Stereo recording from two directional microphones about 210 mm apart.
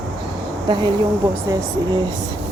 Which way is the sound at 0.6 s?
20° right (ahead or behind).